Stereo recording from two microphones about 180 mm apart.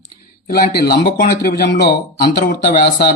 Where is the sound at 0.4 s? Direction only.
55° left (ahead or behind).